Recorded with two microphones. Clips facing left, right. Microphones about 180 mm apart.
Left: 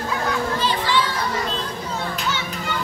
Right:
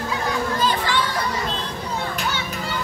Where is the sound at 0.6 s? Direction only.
45° right (ahead or behind).